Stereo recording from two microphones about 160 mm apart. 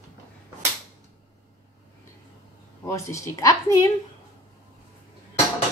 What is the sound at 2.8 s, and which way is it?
Speech, 20° left (ahead or behind).